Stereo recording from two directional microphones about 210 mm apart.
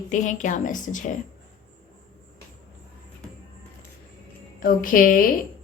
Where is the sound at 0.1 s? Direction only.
35° left (ahead or behind).